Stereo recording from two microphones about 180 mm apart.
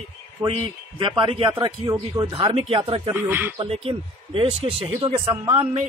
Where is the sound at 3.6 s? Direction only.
30° right (ahead or behind).